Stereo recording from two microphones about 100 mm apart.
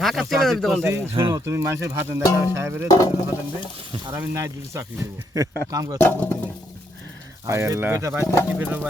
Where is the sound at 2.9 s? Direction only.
40° left (ahead or behind).